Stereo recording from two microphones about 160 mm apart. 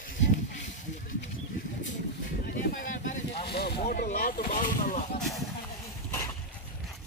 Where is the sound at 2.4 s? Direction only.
65° left (ahead or behind).